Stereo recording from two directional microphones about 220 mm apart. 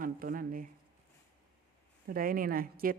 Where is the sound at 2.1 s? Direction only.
40° right (ahead or behind).